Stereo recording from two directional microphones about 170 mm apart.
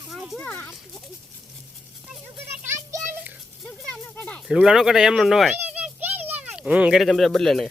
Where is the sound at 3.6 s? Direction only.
5° left (ahead or behind).